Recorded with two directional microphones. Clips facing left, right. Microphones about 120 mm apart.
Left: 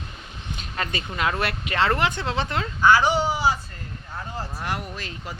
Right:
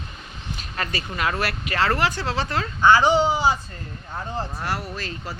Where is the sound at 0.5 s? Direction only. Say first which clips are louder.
Even; 20° left (ahead or behind).